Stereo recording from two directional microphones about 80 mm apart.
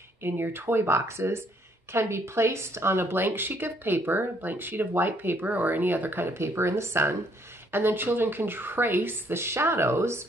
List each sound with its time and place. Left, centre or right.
0.2 s speech: right